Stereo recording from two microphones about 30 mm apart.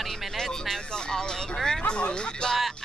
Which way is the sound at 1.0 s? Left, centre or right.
Left.